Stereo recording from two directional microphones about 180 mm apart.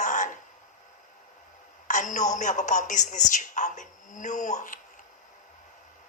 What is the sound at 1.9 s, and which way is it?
A man's voice, 45° left (ahead or behind).